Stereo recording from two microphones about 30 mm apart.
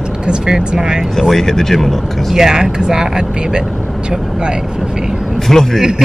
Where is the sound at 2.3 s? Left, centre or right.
Centre.